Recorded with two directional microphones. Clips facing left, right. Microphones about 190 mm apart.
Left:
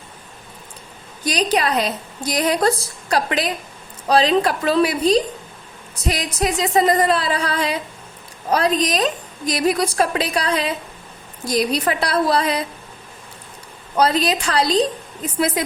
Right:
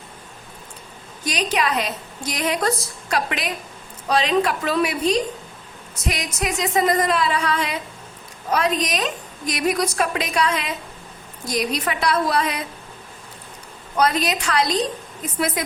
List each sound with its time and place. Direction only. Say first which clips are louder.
1.2 s a woman's voice: left 3 dB; 35° left (ahead or behind)
13.9 s a woman's voice: left 3 dB; 30° left (ahead or behind)